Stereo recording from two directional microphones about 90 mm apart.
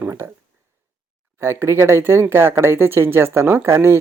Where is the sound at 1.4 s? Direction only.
30° right (ahead or behind).